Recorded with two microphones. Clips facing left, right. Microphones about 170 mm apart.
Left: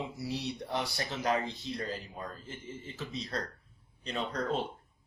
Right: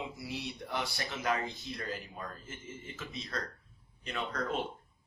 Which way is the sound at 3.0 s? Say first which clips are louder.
Left 3 dB; 35° left (ahead or behind).